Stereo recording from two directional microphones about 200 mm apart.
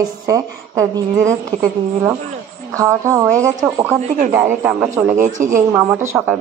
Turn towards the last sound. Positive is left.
turn(degrees=-10)  # may be behind; listen again after turning